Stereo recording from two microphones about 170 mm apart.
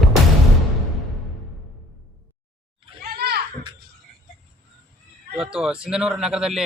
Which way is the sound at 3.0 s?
70° right (ahead or behind).